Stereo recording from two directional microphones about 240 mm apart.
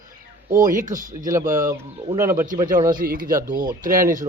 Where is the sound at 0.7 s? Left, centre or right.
Right.